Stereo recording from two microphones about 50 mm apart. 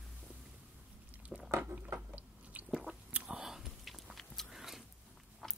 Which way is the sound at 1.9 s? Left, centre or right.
Right.